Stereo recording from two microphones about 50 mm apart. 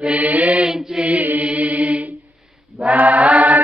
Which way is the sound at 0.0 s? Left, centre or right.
Right.